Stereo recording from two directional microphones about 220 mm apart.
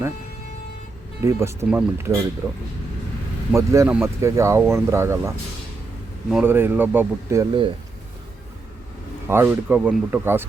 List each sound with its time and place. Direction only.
1.2 s speech: 10° right (ahead or behind)
6.3 s speech: 10° right (ahead or behind)
9.2 s speech: 10° right (ahead or behind)